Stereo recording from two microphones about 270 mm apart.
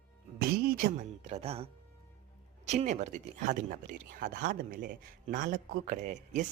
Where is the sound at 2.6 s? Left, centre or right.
Right.